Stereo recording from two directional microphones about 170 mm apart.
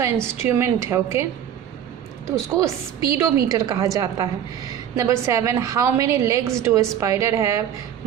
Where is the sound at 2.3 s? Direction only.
20° right (ahead or behind).